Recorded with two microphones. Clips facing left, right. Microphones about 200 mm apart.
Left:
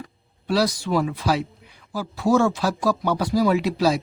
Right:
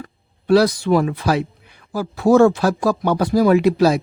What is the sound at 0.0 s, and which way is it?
Speech, 55° right (ahead or behind).